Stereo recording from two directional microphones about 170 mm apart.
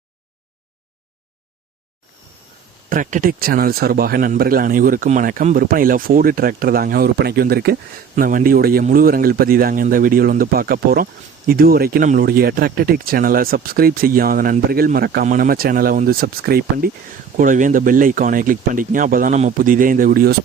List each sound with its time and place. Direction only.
2.9 s speech: 50° right (ahead or behind)
17.3 s speech: 50° right (ahead or behind)